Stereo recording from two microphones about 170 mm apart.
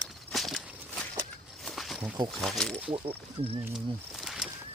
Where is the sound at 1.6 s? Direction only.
Centre (ahead or behind).